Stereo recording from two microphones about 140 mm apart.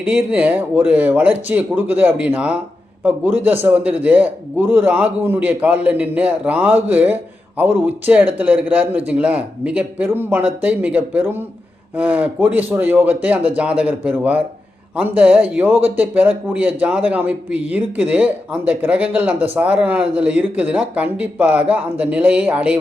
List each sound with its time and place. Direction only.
0.0 s a man's voice: 10° right (ahead or behind)